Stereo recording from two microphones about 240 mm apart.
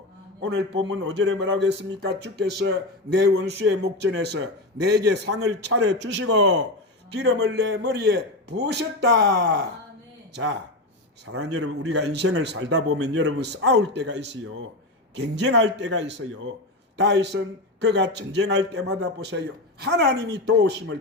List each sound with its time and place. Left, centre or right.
0.4 s speech: right
5.2 s a man's voice: right
5.6 s speech: right
11.3 s a man's voice: right
11.9 s speech: right
12.9 s a man's voice: right
13.4 s speech: right